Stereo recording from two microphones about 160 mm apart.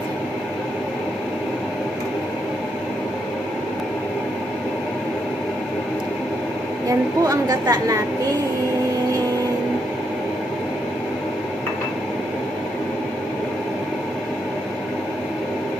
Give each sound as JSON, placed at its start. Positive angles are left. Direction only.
{"t": 6.9, "sound": "a woman's voice", "side_deg": -20}